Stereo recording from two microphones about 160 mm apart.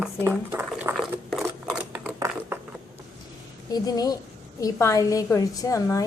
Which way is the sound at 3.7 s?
25° left (ahead or behind).